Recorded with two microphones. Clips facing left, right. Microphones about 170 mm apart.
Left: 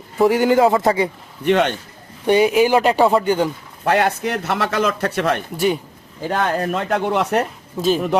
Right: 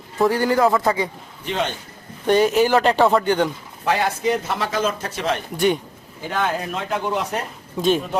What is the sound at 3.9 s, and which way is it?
Speech, 60° left (ahead or behind).